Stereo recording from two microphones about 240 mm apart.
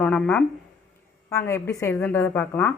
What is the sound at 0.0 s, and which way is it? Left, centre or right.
Speech, centre.